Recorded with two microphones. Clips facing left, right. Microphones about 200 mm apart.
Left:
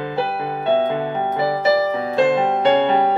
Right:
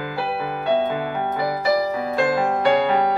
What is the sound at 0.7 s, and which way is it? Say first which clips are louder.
Music: left 3 dB; 25° left (ahead or behind).